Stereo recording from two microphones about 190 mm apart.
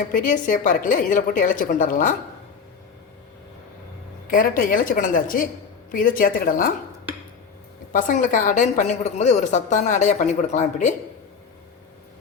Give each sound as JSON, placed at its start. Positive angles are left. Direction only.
{"t": 0.1, "sound": "a woman's voice", "side_deg": 45}
{"t": 4.3, "sound": "a woman's voice", "side_deg": 45}
{"t": 7.9, "sound": "a woman's voice", "side_deg": 45}